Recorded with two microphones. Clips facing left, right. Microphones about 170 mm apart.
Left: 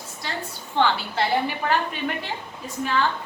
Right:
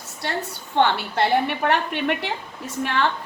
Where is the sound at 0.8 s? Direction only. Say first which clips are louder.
Right 2 dB; 60° right (ahead or behind).